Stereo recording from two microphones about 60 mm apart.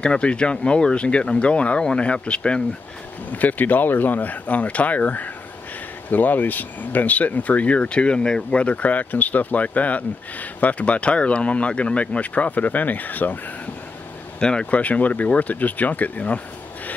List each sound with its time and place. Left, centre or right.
0.0 s speech: centre
3.3 s speech: left
14.4 s speech: centre